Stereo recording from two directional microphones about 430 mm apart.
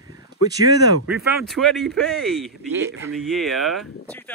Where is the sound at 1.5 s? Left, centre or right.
Centre.